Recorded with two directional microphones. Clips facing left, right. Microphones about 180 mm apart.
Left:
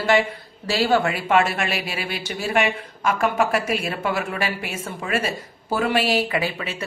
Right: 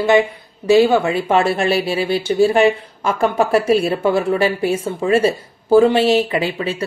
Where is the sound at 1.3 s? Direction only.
30° right (ahead or behind).